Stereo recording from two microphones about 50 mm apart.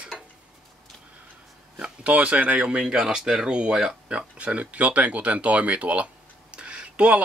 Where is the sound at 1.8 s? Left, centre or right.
Right.